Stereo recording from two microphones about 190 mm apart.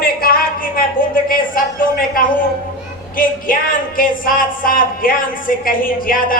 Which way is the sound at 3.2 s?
45° left (ahead or behind).